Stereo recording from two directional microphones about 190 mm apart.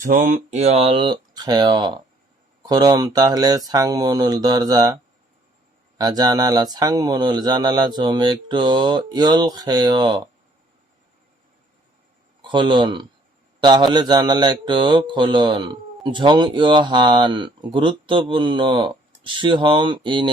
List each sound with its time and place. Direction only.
0.0 s speech: 45° right (ahead or behind); by 4.9 s 20° right (ahead or behind)
6.0 s speech: 20° right (ahead or behind)
12.4 s speech: 25° right (ahead or behind)